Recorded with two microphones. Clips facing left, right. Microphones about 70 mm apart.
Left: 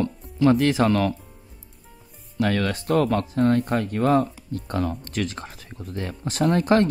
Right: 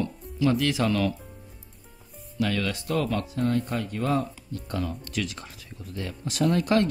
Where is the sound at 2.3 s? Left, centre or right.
Left.